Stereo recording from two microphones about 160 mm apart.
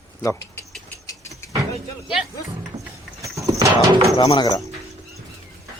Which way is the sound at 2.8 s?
25° right (ahead or behind).